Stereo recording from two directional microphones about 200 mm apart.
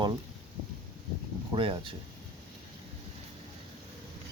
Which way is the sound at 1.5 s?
25° right (ahead or behind).